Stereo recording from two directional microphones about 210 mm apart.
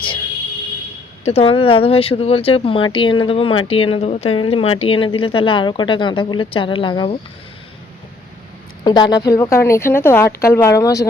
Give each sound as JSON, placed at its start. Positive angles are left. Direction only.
{"t": 1.2, "sound": "speech", "side_deg": 30}
{"t": 8.8, "sound": "a woman's voice", "side_deg": 20}